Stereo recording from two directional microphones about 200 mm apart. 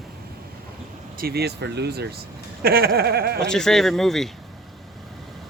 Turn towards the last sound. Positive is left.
turn(degrees=0)  # may be behind; listen again after turning